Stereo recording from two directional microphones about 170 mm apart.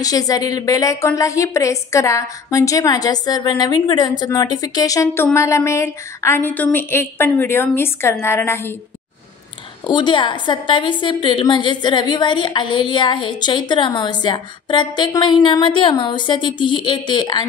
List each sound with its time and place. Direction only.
0.0 s a woman's voice: 20° left (ahead or behind)
9.8 s a woman's voice: 25° left (ahead or behind)